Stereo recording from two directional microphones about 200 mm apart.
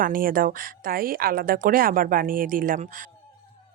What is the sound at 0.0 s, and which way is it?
A woman's voice, 45° right (ahead or behind).